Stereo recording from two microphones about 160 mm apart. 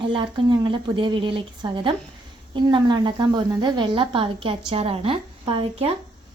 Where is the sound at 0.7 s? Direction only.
30° right (ahead or behind).